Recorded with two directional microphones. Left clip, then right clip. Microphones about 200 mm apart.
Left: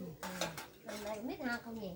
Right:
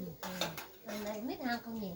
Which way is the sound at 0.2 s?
5° left (ahead or behind).